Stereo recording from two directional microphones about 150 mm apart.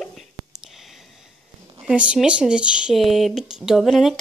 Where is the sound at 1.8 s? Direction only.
5° right (ahead or behind).